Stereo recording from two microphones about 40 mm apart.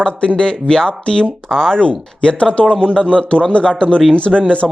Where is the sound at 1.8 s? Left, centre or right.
Left.